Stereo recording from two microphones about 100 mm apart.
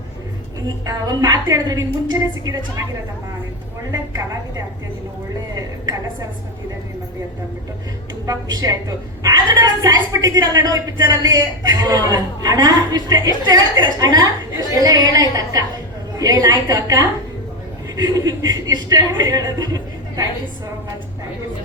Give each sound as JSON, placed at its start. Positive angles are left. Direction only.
{"t": 0.9, "sound": "a woman's voice", "side_deg": -40}
{"t": 4.1, "sound": "a woman's voice", "side_deg": -35}
{"t": 8.3, "sound": "a woman's voice", "side_deg": -40}